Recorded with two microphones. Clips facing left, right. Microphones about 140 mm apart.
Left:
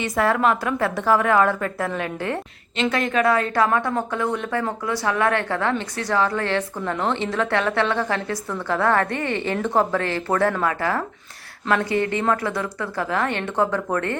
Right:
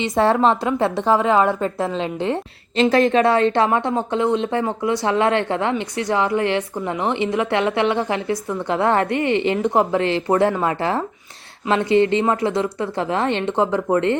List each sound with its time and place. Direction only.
0.0 s a woman's voice: 25° right (ahead or behind)